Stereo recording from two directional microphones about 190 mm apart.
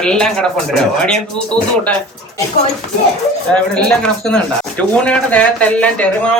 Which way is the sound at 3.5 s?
5° left (ahead or behind).